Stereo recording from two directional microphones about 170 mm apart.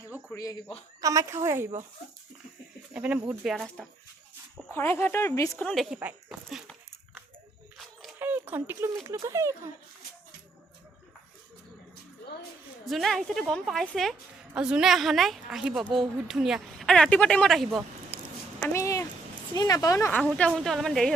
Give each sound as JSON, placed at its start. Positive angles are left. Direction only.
{"t": 1.0, "sound": "a woman's voice", "side_deg": -20}
{"t": 2.9, "sound": "a woman's voice", "side_deg": -10}
{"t": 4.7, "sound": "speech", "side_deg": 15}
{"t": 5.5, "sound": "a woman's voice", "side_deg": 5}
{"t": 6.0, "sound": "dog", "side_deg": -5}
{"t": 8.2, "sound": "a sound", "side_deg": -10}
{"t": 9.0, "sound": "a woman's voice", "side_deg": -20}
{"t": 12.8, "sound": "a woman's voice", "side_deg": 0}
{"t": 18.6, "sound": "cat", "side_deg": 15}
{"t": 19.5, "sound": "speech", "side_deg": 20}
{"t": 20.2, "sound": "a woman's voice", "side_deg": -5}